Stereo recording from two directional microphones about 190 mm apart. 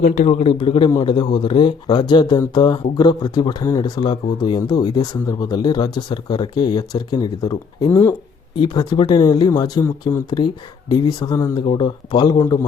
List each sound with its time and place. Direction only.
0.1 s speech: 35° left (ahead or behind); by 12.5 s 20° left (ahead or behind)